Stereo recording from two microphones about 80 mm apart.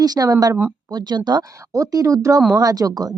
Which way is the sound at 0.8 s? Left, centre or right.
Right.